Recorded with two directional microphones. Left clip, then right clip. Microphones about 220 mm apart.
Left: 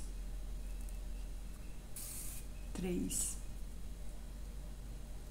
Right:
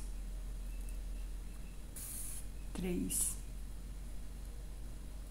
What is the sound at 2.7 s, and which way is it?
Speech, 10° right (ahead or behind).